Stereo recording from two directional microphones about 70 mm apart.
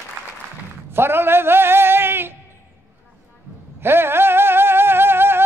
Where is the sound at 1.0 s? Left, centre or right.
Right.